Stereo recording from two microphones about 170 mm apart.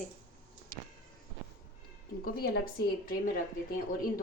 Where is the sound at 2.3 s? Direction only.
65° left (ahead or behind).